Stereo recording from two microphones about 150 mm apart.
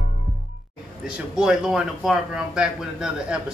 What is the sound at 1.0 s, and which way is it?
A man's voice, 5° right (ahead or behind).